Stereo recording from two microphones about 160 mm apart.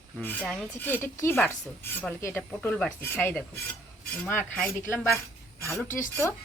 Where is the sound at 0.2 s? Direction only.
10° left (ahead or behind).